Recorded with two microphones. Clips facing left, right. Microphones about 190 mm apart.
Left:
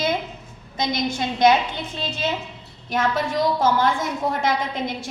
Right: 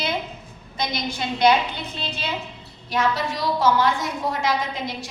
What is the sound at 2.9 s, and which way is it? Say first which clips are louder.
A woman's voice: left 1 dB; 50° left (ahead or behind).